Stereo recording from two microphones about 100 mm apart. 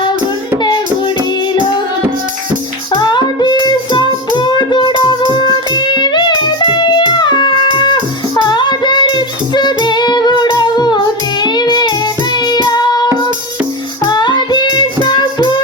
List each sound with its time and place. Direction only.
2.9 s child singing: 45° left (ahead or behind)
5.4 s music: 50° left (ahead or behind)
14.1 s child singing: 50° left (ahead or behind)